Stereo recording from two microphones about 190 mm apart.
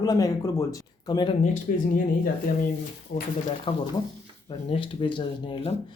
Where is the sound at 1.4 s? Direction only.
45° left (ahead or behind).